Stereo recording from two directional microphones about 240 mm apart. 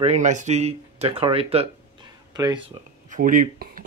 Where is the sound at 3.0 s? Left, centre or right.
Right.